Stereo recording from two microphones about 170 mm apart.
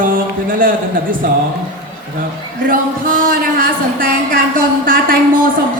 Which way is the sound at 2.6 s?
55° right (ahead or behind).